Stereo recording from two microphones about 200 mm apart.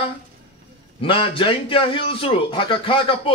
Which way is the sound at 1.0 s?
25° left (ahead or behind).